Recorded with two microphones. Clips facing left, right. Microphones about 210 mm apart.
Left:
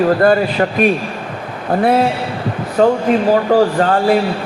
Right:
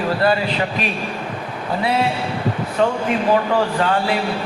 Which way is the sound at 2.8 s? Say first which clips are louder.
Left 6 dB; 40° left (ahead or behind).